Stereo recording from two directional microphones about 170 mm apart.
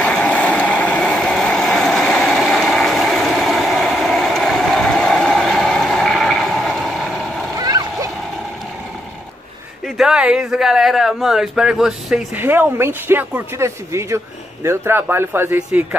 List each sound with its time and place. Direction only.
0.0 s vehicle: 5° left (ahead or behind)
7.5 s splash: 20° right (ahead or behind)
9.9 s speech: 5° right (ahead or behind)